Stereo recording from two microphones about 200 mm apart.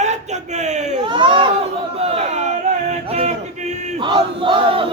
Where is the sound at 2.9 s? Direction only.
35° right (ahead or behind).